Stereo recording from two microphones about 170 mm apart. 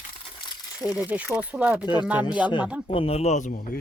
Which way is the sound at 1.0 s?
10° right (ahead or behind).